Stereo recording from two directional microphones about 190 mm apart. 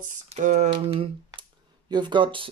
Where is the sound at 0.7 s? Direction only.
30° right (ahead or behind).